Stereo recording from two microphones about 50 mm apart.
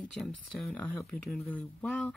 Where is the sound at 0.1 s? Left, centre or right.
Centre.